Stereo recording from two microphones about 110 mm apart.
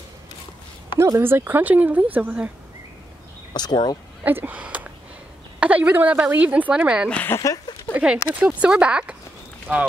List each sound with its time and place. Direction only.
0.9 s speech: 25° right (ahead or behind)
3.5 s speech: 40° left (ahead or behind)
4.2 s speech: 15° right (ahead or behind)
7.1 s speech: 15° left (ahead or behind)
7.3 s speech: 35° left (ahead or behind)
7.9 s speech: 10° right (ahead or behind)